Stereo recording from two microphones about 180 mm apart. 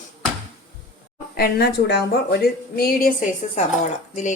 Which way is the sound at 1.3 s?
60° left (ahead or behind).